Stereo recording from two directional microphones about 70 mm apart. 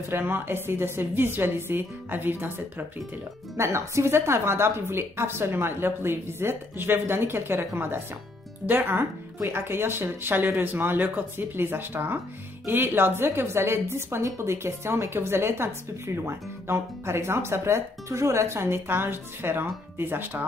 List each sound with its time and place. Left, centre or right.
0.1 s a woman's voice: right
3.5 s a woman's voice: right